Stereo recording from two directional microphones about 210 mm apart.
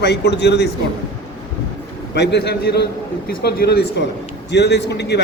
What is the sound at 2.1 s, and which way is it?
Speech, 55° left (ahead or behind).